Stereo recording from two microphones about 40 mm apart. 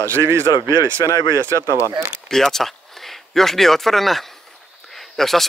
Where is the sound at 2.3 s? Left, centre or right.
Centre.